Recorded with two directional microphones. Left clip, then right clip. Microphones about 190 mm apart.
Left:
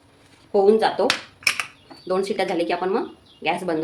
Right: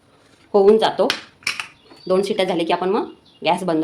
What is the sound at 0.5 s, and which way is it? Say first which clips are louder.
Speech: right 3 dB; 35° right (ahead or behind).